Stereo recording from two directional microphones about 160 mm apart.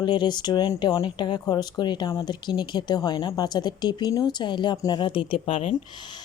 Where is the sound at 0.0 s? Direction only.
25° left (ahead or behind).